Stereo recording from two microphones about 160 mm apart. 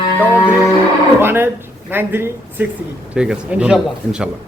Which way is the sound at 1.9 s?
15° right (ahead or behind).